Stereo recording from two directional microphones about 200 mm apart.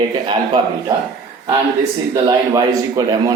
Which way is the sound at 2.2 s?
20° right (ahead or behind).